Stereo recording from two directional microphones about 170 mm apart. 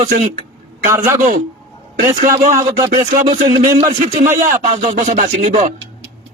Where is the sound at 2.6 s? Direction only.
20° right (ahead or behind).